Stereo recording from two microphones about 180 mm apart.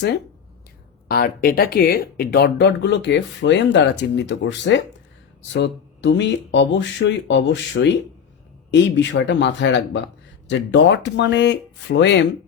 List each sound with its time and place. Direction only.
1.0 s speech: 55° left (ahead or behind); by 12.1 s 75° left (ahead or behind)